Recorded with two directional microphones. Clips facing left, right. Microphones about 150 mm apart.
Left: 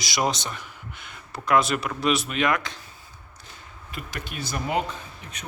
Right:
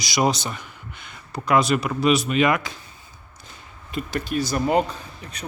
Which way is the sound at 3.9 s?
30° right (ahead or behind).